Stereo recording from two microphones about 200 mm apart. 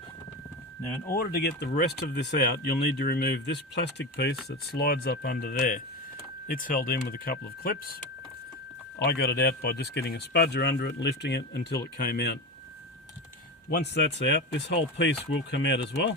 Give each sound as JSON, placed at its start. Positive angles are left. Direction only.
{"t": 1.0, "sound": "speech", "side_deg": 45}
{"t": 9.0, "sound": "speech", "side_deg": 55}
{"t": 13.7, "sound": "speech", "side_deg": 55}